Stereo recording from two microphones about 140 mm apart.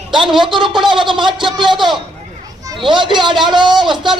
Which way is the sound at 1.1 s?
35° right (ahead or behind).